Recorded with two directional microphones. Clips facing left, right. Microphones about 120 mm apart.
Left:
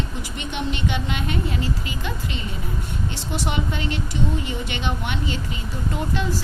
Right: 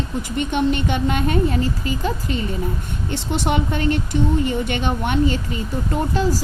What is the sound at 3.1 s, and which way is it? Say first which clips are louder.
A woman's voice: right 7 dB; 55° right (ahead or behind).